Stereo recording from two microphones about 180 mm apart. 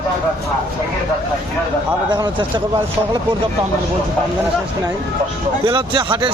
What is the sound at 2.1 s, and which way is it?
Speech, 25° right (ahead or behind).